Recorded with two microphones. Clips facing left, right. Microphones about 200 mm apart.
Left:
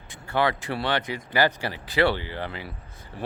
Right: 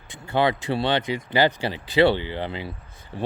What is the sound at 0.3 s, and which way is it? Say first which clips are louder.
Speech: right 3 dB; 25° right (ahead or behind).